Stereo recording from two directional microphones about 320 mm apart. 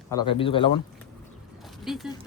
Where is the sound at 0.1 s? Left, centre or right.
Centre.